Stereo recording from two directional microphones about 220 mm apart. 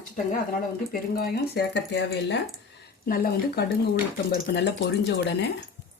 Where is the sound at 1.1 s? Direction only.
45° left (ahead or behind).